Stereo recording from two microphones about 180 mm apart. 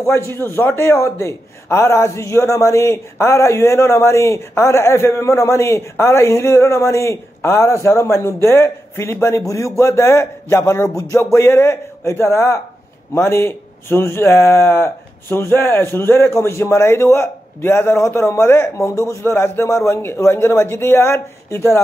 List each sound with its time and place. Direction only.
0.3 s a man's voice: 15° left (ahead or behind)